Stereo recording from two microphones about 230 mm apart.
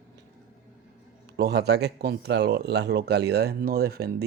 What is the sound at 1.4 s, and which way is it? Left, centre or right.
Speech, right.